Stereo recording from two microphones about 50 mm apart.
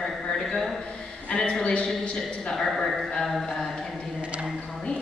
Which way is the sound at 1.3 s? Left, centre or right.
Centre.